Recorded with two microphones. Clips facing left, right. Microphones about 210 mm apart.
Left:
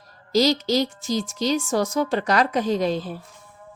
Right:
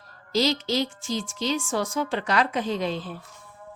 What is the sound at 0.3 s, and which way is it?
A woman's voice, 40° left (ahead or behind).